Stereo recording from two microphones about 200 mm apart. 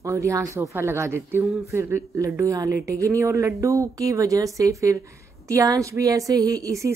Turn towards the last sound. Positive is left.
turn(degrees=-15)  # may be behind; listen again after turning